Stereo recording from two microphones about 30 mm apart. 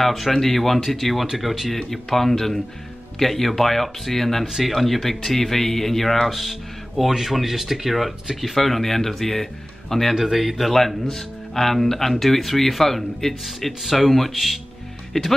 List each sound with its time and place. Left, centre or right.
0.0 s a man's voice: centre
0.7 s speech: centre
1.9 s a man's voice: centre
7.0 s a man's voice: centre
10.1 s speech: centre
10.6 s a man's voice: centre
13.8 s speech: centre
15.1 s speech: left